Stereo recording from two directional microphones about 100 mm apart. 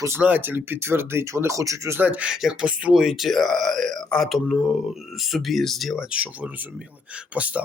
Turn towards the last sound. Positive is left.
turn(degrees=-15)  # may be behind; listen again after turning